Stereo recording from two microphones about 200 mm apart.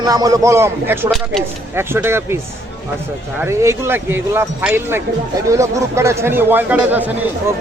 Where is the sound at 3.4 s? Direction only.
15° right (ahead or behind).